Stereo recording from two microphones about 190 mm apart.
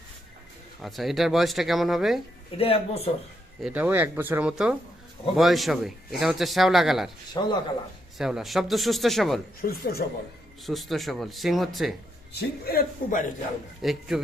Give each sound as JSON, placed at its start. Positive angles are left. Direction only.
{"t": 0.8, "sound": "speech", "side_deg": 0}
{"t": 2.6, "sound": "speech", "side_deg": 30}
{"t": 3.6, "sound": "speech", "side_deg": -10}
{"t": 7.3, "sound": "speech", "side_deg": 20}
{"t": 8.2, "sound": "speech", "side_deg": 0}
{"t": 9.6, "sound": "a man's voice", "side_deg": 50}
{"t": 10.6, "sound": "speech", "side_deg": 0}
{"t": 12.3, "sound": "a man's voice", "side_deg": 55}
{"t": 13.8, "sound": "speech", "side_deg": 0}